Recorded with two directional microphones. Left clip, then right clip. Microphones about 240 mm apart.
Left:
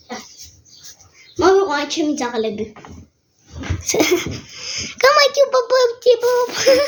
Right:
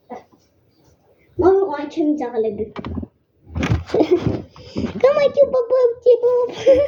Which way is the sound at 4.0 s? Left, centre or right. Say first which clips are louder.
Even; left.